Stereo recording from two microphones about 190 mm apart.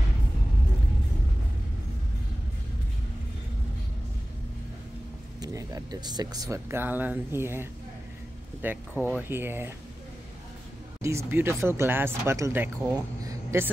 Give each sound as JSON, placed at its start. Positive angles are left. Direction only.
{"t": 5.4, "sound": "speech", "side_deg": -20}
{"t": 8.6, "sound": "speech", "side_deg": -10}
{"t": 11.0, "sound": "speech", "side_deg": -15}